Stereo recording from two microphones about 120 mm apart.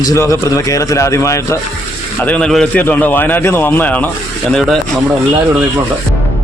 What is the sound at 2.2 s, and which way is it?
A man's voice, 10° left (ahead or behind).